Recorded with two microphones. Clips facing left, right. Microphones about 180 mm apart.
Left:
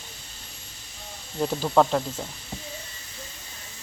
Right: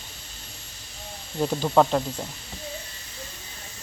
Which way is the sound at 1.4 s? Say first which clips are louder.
Right 1 dB; centre (ahead or behind).